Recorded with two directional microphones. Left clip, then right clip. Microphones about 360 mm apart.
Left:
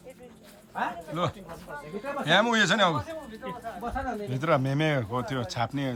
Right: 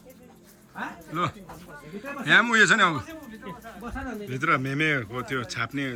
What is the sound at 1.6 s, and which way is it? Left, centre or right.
Speech, left.